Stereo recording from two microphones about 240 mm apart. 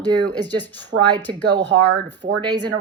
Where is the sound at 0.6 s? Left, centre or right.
Centre.